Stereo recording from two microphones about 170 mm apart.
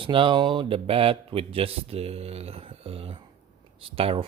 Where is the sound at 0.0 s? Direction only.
30° right (ahead or behind).